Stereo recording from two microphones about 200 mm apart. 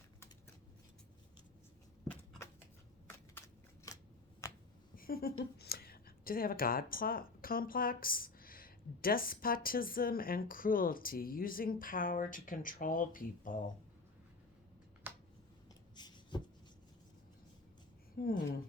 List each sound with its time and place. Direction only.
4.4 s finger snapping: 15° left (ahead or behind)
4.9 s a sound: 45° left (ahead or behind)
5.5 s speech: 50° left (ahead or behind)
15.1 s finger snapping: 10° right (ahead or behind)
16.0 s a sound: 20° left (ahead or behind)
18.2 s speech: 50° left (ahead or behind)